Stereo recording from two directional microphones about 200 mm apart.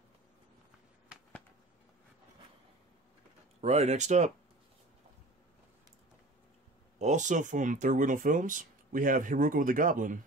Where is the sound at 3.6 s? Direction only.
35° right (ahead or behind).